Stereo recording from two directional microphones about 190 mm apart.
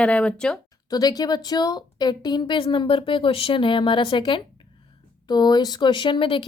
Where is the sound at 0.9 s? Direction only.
20° left (ahead or behind).